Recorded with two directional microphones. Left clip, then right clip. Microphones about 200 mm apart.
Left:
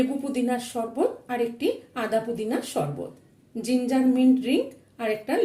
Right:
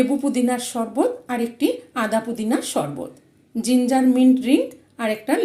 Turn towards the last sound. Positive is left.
turn(degrees=-15)  # may be behind; listen again after turning